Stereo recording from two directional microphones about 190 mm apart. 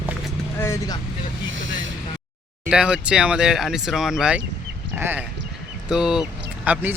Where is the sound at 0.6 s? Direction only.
15° left (ahead or behind).